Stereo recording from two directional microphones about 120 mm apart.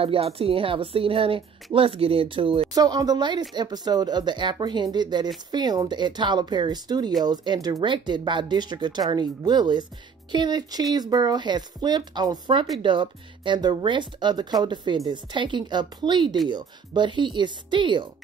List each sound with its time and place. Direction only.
0.0 s a woman's voice: 55° right (ahead or behind)
2.7 s speech: 30° right (ahead or behind)